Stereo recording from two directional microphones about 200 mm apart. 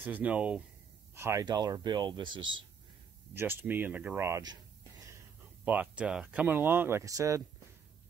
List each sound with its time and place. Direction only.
0.0 s speech: 10° right (ahead or behind); by 2.6 s 25° right (ahead or behind)
3.3 s speech: 10° right (ahead or behind)
5.7 s speech: 5° right (ahead or behind)